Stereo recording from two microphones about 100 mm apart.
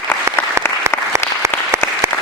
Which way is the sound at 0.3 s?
25° right (ahead or behind).